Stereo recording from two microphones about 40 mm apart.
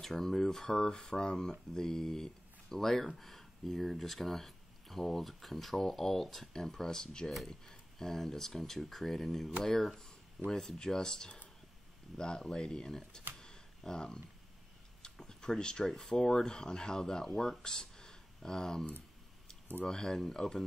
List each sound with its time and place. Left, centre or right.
0.0 s speech: centre
13.4 s a sound: centre
15.9 s speech: centre